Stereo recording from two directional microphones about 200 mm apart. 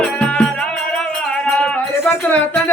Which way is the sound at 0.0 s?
5° left (ahead or behind).